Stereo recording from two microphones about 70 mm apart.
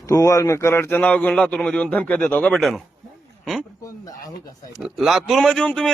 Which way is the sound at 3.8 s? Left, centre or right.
Left.